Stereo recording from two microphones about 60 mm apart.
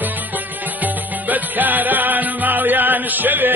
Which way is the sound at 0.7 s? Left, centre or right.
Right.